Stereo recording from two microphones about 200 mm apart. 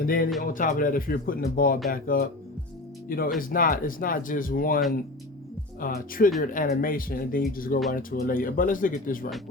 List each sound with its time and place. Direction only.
0.0 s speech: 45° left (ahead or behind)
5.8 s speech: 45° left (ahead or behind)